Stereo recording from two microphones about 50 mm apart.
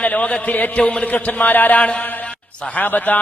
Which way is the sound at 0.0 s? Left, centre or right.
Left.